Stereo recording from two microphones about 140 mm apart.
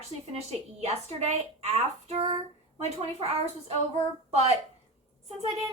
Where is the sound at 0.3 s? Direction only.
50° right (ahead or behind).